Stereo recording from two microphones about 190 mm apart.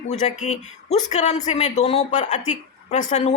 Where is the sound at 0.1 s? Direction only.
35° left (ahead or behind).